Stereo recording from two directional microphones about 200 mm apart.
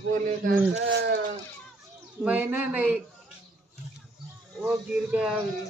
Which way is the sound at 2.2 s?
5° right (ahead or behind).